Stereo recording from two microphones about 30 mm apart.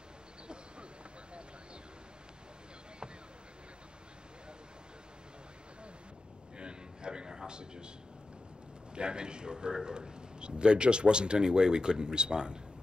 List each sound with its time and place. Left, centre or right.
6.5 s a sound: right
7.4 s a man's voice: right
8.9 s a man's voice: right